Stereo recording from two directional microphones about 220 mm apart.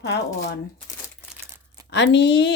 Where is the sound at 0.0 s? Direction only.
50° left (ahead or behind).